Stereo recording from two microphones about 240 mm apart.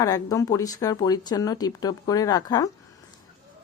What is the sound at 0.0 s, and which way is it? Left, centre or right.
Speech, centre.